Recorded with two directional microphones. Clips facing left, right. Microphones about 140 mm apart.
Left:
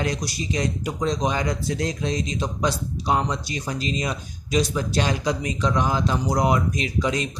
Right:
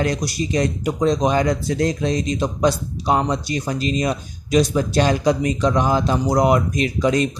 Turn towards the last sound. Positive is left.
turn(degrees=-50)  # may be behind; listen again after turning